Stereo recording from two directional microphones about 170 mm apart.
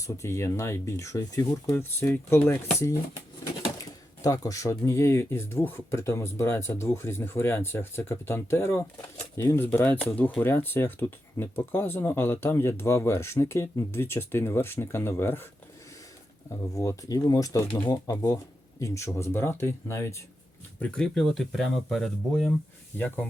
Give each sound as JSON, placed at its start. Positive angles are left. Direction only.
{"t": 0.0, "sound": "speech", "side_deg": 15}
{"t": 16.7, "sound": "speech", "side_deg": 20}